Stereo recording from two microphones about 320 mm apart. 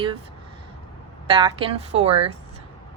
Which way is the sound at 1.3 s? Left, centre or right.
Centre.